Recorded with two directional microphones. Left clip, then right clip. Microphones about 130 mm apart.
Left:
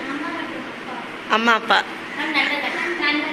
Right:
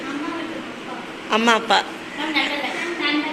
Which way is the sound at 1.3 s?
25° right (ahead or behind).